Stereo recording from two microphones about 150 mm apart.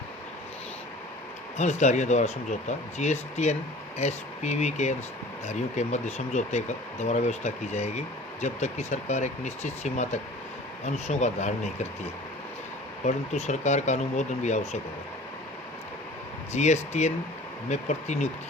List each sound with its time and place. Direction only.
1.5 s speech: 50° left (ahead or behind)
13.1 s speech: 50° left (ahead or behind)
16.6 s speech: 50° left (ahead or behind)